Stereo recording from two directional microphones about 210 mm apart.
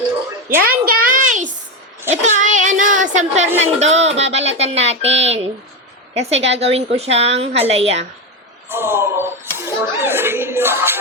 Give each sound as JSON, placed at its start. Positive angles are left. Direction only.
{"t": 0.4, "sound": "a sound", "side_deg": -45}
{"t": 3.6, "sound": "a woman's voice", "side_deg": -30}
{"t": 8.7, "sound": "speech", "side_deg": -10}